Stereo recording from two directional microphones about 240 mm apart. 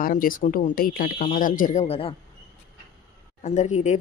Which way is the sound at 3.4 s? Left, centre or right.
Left.